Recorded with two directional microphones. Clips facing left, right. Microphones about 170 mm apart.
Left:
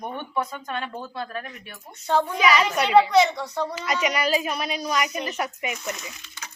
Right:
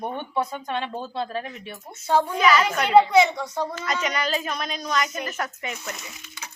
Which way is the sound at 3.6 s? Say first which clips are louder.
Left 2 dB; 10° left (ahead or behind).